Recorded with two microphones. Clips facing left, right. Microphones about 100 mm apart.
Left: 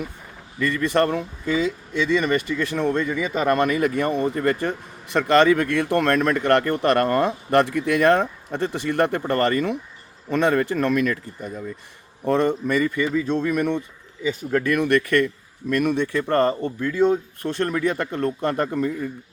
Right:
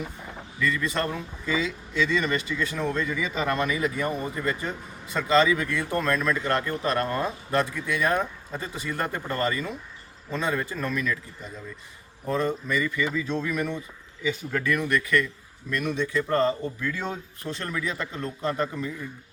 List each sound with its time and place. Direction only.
0.6 s speech: 60° left (ahead or behind)
12.2 s speech: 70° left (ahead or behind); by 18.9 s 50° left (ahead or behind)